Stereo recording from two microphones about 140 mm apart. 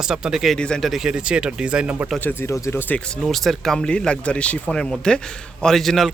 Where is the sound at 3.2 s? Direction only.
Centre (ahead or behind).